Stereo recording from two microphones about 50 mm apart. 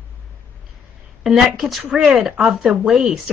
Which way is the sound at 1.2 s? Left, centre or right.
Centre.